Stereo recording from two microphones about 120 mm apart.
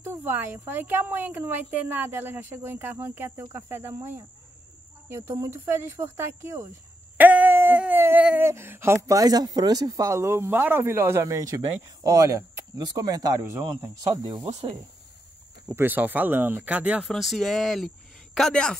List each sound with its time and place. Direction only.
0.0 s a woman's voice: 15° right (ahead or behind)
7.2 s a sound: 15° right (ahead or behind)
8.5 s speech: 20° right (ahead or behind)
13.4 s speech: 20° right (ahead or behind)
14.2 s speech: 45° right (ahead or behind)
14.5 s speech: 55° right (ahead or behind)
15.6 s a woman's voice: 20° right (ahead or behind)
17.1 s speech: centre (ahead or behind)